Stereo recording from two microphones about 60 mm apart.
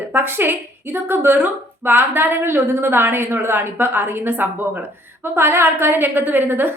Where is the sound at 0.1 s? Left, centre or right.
Right.